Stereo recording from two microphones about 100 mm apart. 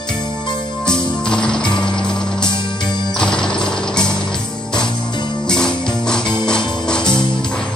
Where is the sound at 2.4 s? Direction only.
50° left (ahead or behind).